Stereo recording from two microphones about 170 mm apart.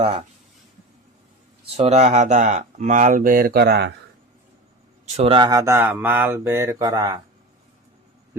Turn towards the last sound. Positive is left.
turn(degrees=-20)  # may be behind; listen again after turning